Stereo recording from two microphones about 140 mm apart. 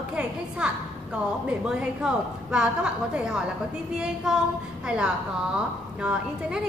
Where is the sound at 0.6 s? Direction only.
5° right (ahead or behind).